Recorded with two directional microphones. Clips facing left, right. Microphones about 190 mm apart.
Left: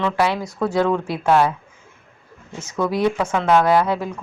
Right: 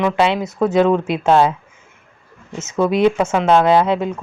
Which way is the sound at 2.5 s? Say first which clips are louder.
Right 5 dB; 25° right (ahead or behind).